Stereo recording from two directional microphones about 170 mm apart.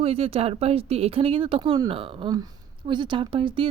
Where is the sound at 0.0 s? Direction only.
35° right (ahead or behind).